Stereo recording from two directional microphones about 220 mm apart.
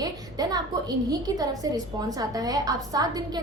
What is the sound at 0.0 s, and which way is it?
A woman's voice, 15° right (ahead or behind).